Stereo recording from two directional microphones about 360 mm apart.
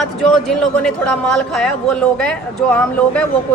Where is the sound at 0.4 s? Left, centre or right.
Centre.